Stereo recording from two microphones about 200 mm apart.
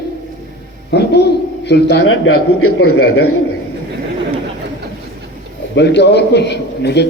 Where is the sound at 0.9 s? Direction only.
55° left (ahead or behind).